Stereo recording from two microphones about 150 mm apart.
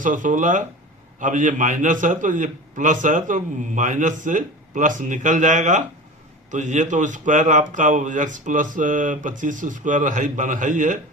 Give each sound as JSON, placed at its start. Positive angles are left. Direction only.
{"t": 0.0, "sound": "a man's voice", "side_deg": -60}